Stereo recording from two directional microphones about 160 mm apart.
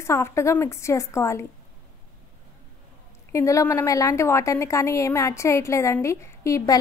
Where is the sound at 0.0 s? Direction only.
15° left (ahead or behind).